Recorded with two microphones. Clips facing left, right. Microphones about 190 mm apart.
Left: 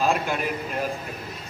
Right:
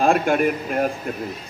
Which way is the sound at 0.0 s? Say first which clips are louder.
Right 7 dB; 55° right (ahead or behind).